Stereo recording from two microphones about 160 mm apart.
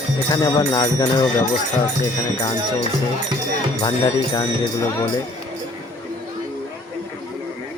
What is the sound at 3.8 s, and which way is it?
Speech, 25° left (ahead or behind).